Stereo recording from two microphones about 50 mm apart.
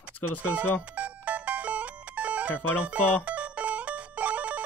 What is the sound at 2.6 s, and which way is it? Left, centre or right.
Speech, right.